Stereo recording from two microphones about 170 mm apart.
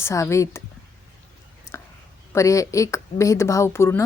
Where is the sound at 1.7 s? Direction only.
15° left (ahead or behind).